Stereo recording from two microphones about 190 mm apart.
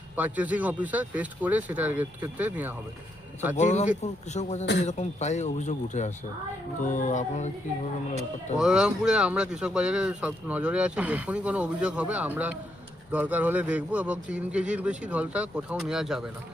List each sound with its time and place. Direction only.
0.2 s speech: 10° right (ahead or behind)
3.6 s speech: 40° left (ahead or behind)
8.5 s speech: 5° right (ahead or behind)